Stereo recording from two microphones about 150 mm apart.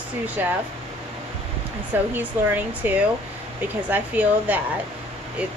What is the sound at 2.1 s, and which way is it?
Speech, 10° right (ahead or behind).